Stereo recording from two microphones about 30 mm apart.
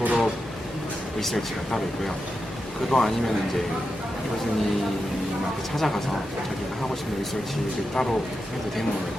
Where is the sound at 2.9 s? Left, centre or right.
Centre.